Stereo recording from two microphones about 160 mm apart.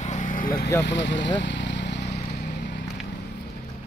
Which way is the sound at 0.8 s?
90° left.